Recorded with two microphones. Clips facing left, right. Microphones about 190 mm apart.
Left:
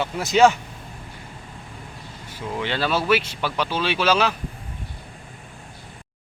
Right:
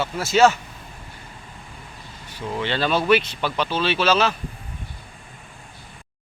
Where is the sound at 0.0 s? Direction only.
15° left (ahead or behind).